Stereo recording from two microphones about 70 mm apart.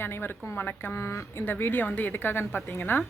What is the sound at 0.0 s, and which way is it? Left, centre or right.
Speech, left.